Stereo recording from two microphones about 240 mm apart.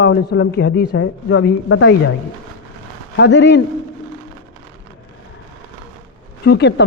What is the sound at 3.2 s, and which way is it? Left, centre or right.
Speech, left.